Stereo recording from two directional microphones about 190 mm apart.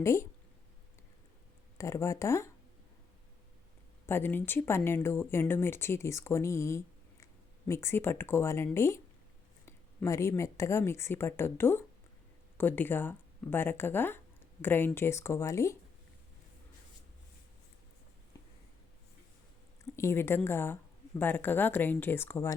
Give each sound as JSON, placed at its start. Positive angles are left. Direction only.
{"t": 0.0, "sound": "speech", "side_deg": 15}
{"t": 1.8, "sound": "speech", "side_deg": 15}
{"t": 4.0, "sound": "speech", "side_deg": 10}
{"t": 19.8, "sound": "a woman's voice", "side_deg": 15}